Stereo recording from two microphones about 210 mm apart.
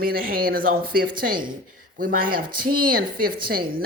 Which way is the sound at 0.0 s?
45° right (ahead or behind).